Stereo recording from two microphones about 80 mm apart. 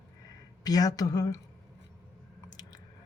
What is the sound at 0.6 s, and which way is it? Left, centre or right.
Speech, left.